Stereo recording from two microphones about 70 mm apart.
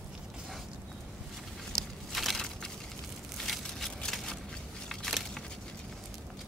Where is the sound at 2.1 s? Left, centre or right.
Centre.